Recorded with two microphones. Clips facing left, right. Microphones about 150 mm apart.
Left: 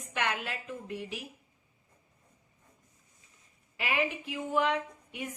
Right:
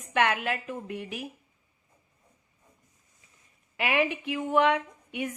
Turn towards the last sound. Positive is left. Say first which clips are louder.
# right 6 dB
turn(degrees=-70)  # may be behind; listen again after turning